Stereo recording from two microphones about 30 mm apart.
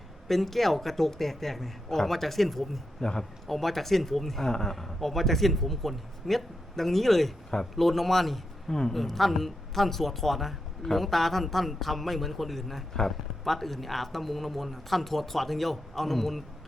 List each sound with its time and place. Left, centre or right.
0.3 s speech: centre
3.0 s a man's voice: left
3.4 s speech: centre
4.4 s a man's voice: centre
4.8 s speech: centre